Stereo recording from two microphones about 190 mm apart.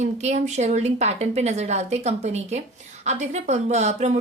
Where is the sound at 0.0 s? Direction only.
35° right (ahead or behind).